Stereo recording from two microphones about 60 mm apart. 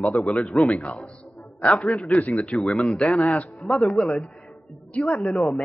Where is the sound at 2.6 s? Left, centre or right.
Centre.